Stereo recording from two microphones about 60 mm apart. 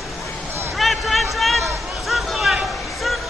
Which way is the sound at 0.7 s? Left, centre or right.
Centre.